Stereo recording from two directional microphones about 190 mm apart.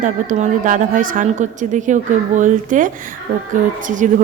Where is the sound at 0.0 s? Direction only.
40° right (ahead or behind).